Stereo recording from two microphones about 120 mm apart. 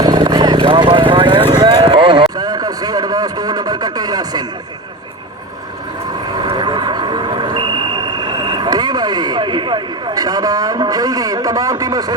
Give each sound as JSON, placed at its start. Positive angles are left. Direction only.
{"t": 0.0, "sound": "vehicle", "side_deg": -35}
{"t": 2.4, "sound": "a sound", "side_deg": -35}
{"t": 6.4, "sound": "vehicle", "side_deg": -40}